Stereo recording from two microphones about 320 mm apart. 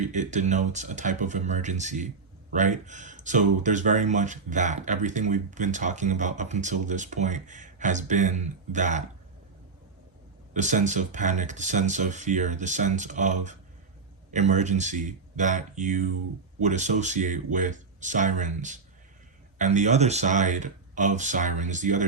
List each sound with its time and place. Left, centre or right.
0.0 s speech: right
10.5 s speech: right